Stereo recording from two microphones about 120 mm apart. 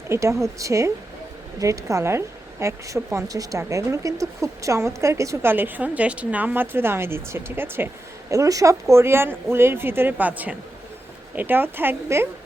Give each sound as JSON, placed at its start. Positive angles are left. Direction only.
{"t": 0.1, "sound": "speech", "side_deg": -25}
{"t": 8.3, "sound": "a woman's voice", "side_deg": -30}